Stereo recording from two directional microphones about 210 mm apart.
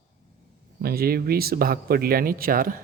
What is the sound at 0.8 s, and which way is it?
A man's voice, 45° right (ahead or behind).